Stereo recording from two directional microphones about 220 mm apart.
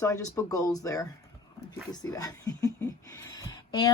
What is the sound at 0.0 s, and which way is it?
Speech, 15° left (ahead or behind).